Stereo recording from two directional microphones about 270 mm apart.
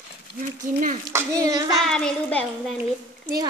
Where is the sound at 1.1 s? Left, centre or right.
Centre.